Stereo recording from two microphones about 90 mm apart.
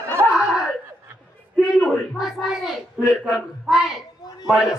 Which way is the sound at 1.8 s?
5° right (ahead or behind).